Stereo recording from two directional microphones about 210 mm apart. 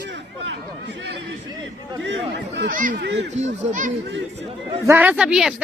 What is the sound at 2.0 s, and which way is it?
Speech, 60° right (ahead or behind).